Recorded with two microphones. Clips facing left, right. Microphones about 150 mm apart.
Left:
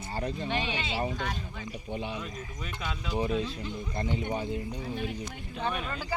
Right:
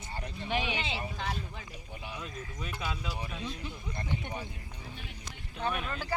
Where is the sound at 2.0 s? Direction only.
25° left (ahead or behind).